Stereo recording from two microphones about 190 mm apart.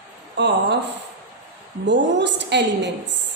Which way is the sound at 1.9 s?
65° right (ahead or behind).